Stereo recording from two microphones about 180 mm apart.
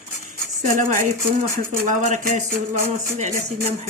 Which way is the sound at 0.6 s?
45° right (ahead or behind).